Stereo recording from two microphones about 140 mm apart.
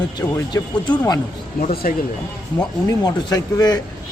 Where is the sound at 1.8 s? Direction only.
90° left.